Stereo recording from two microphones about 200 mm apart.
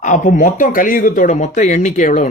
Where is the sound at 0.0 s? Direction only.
40° left (ahead or behind).